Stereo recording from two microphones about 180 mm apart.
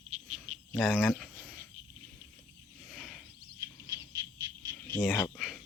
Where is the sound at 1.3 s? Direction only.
10° left (ahead or behind).